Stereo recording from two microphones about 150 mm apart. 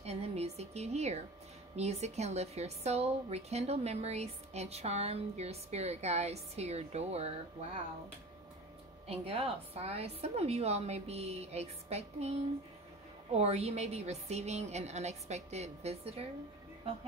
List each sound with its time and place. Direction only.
0.0 s a sound: 45° right (ahead or behind)
1.8 s a woman's voice: 45° right (ahead or behind)
9.0 s a woman's voice: 40° right (ahead or behind)